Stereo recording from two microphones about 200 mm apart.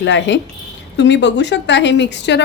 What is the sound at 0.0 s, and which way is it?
A woman's voice, 60° left (ahead or behind).